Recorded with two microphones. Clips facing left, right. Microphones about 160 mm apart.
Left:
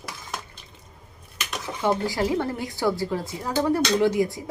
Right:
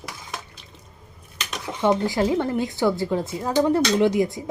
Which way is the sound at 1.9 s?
20° right (ahead or behind).